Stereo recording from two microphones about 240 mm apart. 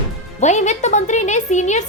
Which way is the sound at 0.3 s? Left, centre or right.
Left.